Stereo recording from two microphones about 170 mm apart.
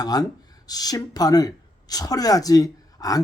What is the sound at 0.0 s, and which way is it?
Speech, 20° left (ahead or behind).